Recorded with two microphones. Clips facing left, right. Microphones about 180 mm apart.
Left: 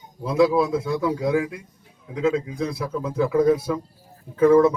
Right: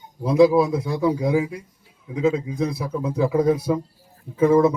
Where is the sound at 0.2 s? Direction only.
20° right (ahead or behind).